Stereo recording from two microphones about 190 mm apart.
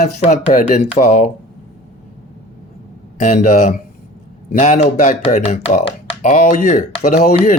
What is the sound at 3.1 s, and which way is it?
Speech, 40° left (ahead or behind).